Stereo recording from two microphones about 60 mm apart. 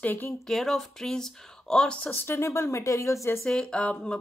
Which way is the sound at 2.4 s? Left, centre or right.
Left.